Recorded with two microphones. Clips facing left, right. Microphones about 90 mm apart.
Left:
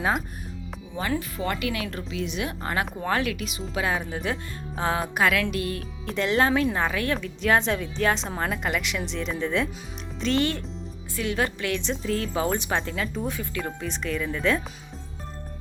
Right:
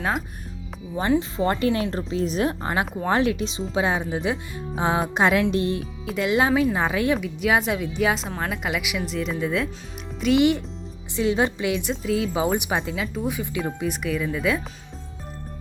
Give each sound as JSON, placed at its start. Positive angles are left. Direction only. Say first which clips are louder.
{"t": 0.9, "sound": "speech", "louder": "right 6 dB", "side_deg": -30}
{"t": 2.8, "sound": "speech", "louder": "right 3 dB", "side_deg": -5}
{"t": 3.1, "sound": "speech", "louder": "right 7 dB", "side_deg": -25}
{"t": 6.1, "sound": "speech", "louder": "right 2 dB", "side_deg": -5}